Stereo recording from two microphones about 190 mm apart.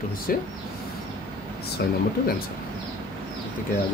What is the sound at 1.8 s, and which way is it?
Speech, 60° left (ahead or behind).